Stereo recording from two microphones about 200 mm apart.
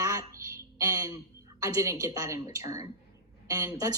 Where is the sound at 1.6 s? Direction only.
15° right (ahead or behind).